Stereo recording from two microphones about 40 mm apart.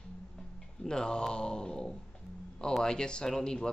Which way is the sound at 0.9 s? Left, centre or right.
Left.